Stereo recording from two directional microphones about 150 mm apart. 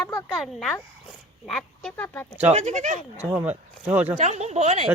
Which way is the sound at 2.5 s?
55° right (ahead or behind).